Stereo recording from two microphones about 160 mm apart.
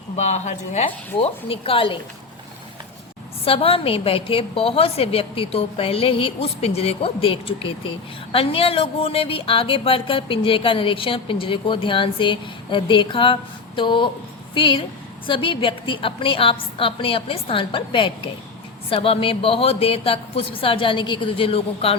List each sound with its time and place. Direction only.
0.2 s speech: 45° left (ahead or behind)
0.9 s a woman's voice: 35° left (ahead or behind)
3.4 s a woman's voice: 35° left (ahead or behind)